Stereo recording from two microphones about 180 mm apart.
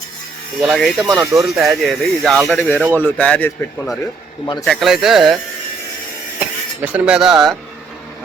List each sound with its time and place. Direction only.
0.6 s speech: centre (ahead or behind)
1.0 s speech: 15° right (ahead or behind)
1.4 s speech: centre (ahead or behind)
6.4 s speech: 10° right (ahead or behind)